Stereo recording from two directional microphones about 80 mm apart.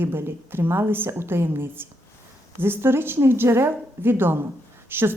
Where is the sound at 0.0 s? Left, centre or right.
Right.